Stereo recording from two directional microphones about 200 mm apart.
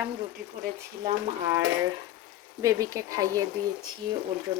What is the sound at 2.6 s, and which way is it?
Speech, 15° right (ahead or behind).